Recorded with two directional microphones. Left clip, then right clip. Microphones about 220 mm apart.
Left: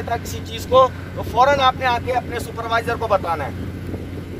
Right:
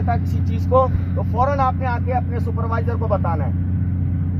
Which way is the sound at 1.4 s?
Centre (ahead or behind).